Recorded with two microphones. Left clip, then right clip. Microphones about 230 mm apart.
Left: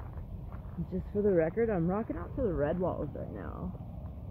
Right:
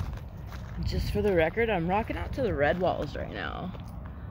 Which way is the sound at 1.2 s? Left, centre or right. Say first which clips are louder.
Right 3 dB; centre.